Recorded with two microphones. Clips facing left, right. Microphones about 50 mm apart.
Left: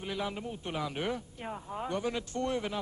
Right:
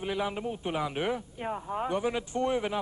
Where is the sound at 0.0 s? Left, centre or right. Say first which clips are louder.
Right 5 dB; centre.